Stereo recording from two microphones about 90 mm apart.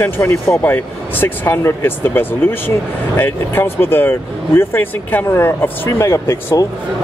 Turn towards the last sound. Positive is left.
turn(degrees=35)  # may be behind; listen again after turning